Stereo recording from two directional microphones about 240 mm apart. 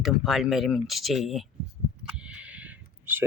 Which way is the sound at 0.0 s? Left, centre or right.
Centre.